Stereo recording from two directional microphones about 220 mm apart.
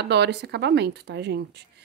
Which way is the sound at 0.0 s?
50° right (ahead or behind).